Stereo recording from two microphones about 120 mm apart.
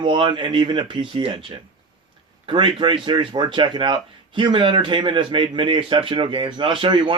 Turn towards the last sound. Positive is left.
turn(degrees=-45)  # may be behind; listen again after turning